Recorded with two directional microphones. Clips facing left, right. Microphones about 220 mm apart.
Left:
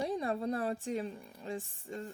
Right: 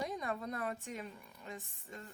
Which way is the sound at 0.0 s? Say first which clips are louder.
Left 6 dB; 30° left (ahead or behind).